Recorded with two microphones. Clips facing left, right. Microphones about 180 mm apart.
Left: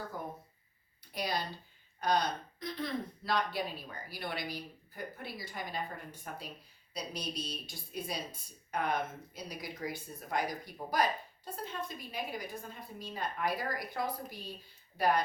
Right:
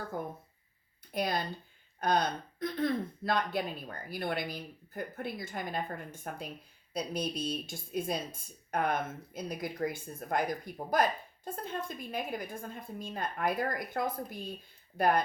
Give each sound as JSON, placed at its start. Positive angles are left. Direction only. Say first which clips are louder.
{"t": 1.1, "sound": "speech", "louder": "right 4 dB", "side_deg": -55}